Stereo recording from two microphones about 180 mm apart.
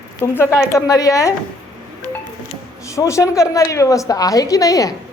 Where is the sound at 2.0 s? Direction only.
20° right (ahead or behind).